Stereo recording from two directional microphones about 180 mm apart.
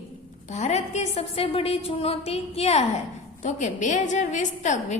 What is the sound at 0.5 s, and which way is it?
A woman's voice, 40° left (ahead or behind).